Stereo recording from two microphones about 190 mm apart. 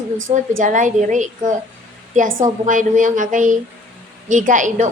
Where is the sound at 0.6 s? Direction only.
40° right (ahead or behind).